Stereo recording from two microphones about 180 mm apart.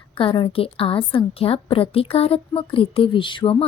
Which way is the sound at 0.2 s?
25° left (ahead or behind).